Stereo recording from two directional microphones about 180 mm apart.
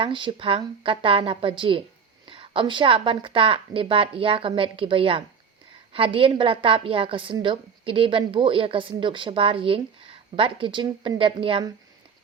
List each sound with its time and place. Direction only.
0.0 s a woman's voice: 25° right (ahead or behind)